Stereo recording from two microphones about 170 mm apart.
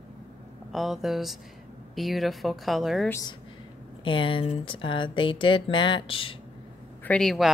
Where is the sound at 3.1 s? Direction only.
20° left (ahead or behind).